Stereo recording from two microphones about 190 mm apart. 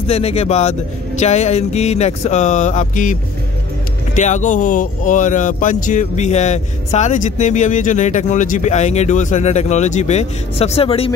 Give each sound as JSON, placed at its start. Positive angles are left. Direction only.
{"t": 0.1, "sound": "speech", "side_deg": 35}